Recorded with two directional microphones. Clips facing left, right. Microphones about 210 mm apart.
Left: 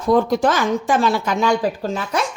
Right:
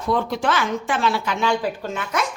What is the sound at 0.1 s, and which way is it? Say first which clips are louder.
Speech: left 6 dB; 40° left (ahead or behind).